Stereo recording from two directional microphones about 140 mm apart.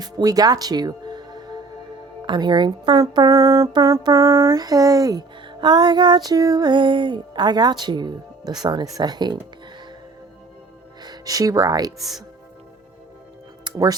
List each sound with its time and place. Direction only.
0.0 s speech: 25° right (ahead or behind)
2.2 s a sound: 35° right (ahead or behind)
11.0 s speech: 30° right (ahead or behind)
11.9 s speech: centre (ahead or behind)
13.7 s music: 25° right (ahead or behind)